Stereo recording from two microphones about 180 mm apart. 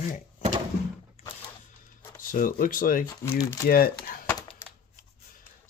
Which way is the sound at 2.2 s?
50° left (ahead or behind).